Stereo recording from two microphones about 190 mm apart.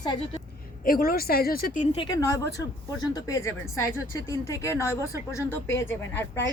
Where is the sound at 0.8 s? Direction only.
50° left (ahead or behind).